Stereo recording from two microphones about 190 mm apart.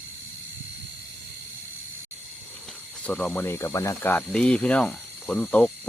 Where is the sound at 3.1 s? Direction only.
5° left (ahead or behind).